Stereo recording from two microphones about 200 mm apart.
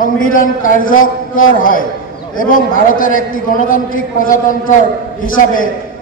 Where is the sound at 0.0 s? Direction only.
45° left (ahead or behind).